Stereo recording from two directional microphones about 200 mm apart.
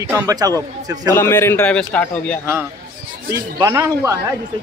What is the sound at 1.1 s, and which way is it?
Speech, 10° left (ahead or behind).